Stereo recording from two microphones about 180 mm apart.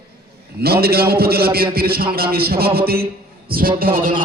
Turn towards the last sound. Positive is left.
turn(degrees=-55)  # may be behind; listen again after turning